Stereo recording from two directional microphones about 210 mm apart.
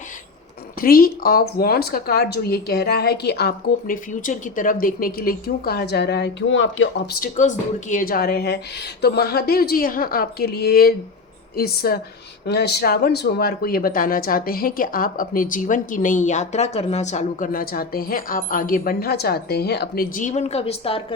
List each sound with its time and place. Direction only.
0.8 s speech: 45° left (ahead or behind); by 7.2 s 65° left (ahead or behind)
7.2 s speech: 35° left (ahead or behind)